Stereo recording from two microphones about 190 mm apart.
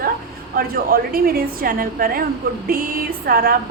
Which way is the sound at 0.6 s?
50° right (ahead or behind).